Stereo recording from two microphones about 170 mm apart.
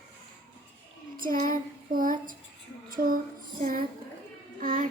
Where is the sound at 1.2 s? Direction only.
55° right (ahead or behind).